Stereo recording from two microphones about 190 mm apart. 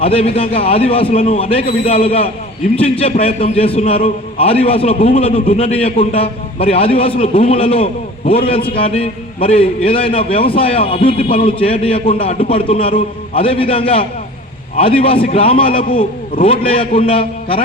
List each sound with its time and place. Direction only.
0.0 s a man's voice: 30° left (ahead or behind)